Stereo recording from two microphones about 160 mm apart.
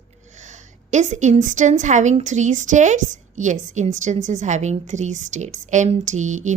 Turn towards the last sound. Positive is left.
turn(degrees=-50)  # may be behind; listen again after turning